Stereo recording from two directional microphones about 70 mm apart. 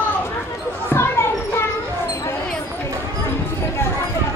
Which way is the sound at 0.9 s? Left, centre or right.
Left.